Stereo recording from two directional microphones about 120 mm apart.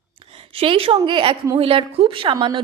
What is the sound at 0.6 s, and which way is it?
A woman's voice, 50° right (ahead or behind).